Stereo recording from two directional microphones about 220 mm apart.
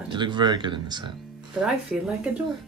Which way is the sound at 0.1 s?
20° right (ahead or behind).